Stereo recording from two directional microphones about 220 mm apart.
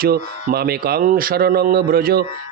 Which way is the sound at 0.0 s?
45° right (ahead or behind).